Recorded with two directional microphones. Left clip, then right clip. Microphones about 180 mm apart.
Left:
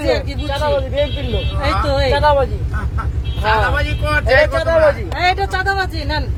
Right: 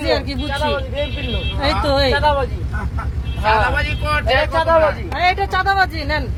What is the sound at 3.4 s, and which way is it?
Speech, 20° left (ahead or behind).